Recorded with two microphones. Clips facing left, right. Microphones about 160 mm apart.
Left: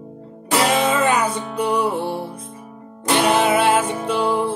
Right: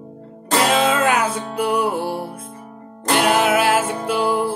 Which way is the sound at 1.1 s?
60° right (ahead or behind).